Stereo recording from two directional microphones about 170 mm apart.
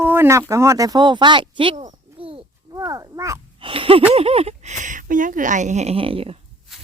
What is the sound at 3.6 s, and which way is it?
Speech, 30° right (ahead or behind).